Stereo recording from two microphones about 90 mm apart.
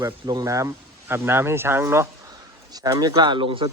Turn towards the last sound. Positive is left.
turn(degrees=-70)  # may be behind; listen again after turning